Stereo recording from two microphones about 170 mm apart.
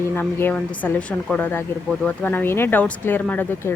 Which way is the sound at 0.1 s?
10° left (ahead or behind).